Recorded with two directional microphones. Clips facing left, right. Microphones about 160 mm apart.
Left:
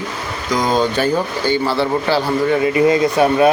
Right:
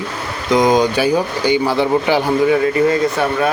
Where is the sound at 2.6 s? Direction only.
15° left (ahead or behind).